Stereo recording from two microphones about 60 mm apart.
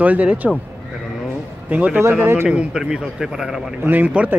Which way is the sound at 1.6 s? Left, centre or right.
Right.